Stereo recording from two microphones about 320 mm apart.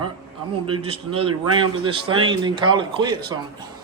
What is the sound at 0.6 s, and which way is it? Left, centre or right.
Speech, centre.